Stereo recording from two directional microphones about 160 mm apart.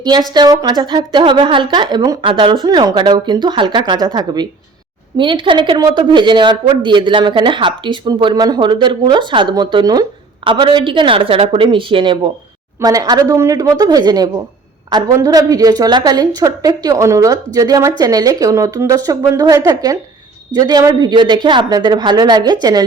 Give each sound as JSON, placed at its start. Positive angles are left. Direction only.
{"t": 0.0, "sound": "a woman's voice", "side_deg": -25}